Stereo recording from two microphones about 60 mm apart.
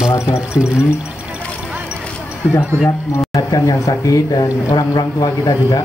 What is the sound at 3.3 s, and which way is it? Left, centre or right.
Speech, left.